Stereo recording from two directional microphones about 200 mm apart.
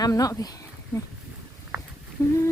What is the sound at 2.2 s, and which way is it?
Speech, 10° left (ahead or behind).